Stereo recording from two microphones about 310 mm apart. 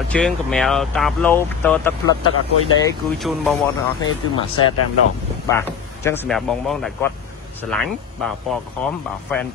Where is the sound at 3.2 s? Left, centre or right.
Centre.